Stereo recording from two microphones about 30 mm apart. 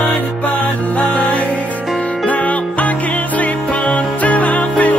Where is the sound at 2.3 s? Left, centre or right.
Left.